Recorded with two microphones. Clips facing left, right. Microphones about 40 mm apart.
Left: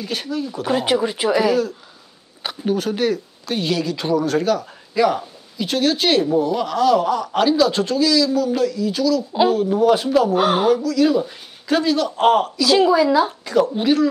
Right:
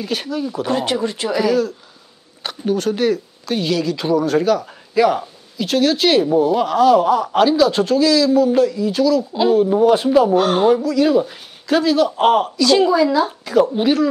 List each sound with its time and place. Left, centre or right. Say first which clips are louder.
0.0 s speech: right 2 dB; centre
0.7 s speech: left 2 dB; centre
9.3 s speech: right 1 dB; centre
9.6 s speech: right 3 dB; centre
10.3 s speech: right 2 dB; centre
11.0 s speech: right 2 dB; centre
13.5 s speech: right 5 dB; centre